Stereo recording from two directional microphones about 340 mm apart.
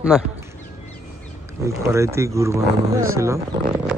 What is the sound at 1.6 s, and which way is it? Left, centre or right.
Speech, centre.